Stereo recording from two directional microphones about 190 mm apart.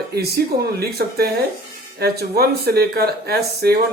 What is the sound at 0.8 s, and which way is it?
Speech, 55° right (ahead or behind).